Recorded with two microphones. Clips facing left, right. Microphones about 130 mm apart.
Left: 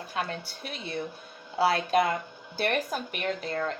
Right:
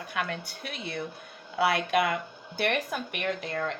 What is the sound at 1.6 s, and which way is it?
A woman's voice, 35° left (ahead or behind).